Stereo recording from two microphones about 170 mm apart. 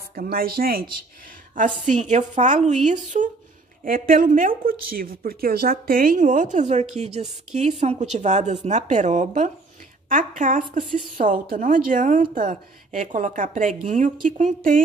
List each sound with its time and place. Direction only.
0.1 s a woman's voice: 60° right (ahead or behind)
10.8 s a woman's voice: centre (ahead or behind)
11.1 s a woman's voice: 55° right (ahead or behind)